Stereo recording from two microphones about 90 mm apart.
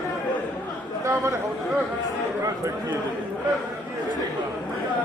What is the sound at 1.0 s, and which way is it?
Speech, 35° right (ahead or behind).